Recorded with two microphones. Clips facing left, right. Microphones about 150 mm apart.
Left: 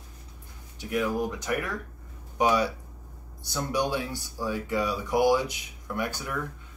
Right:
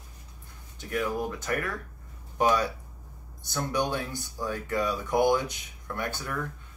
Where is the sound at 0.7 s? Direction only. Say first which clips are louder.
Left 2 dB; 15° left (ahead or behind).